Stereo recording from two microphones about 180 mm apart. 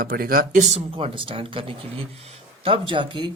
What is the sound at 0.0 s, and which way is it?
Speech, 55° right (ahead or behind).